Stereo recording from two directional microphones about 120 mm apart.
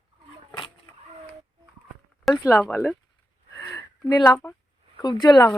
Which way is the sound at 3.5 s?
25° left (ahead or behind).